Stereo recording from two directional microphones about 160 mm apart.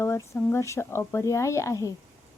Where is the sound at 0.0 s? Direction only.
15° left (ahead or behind).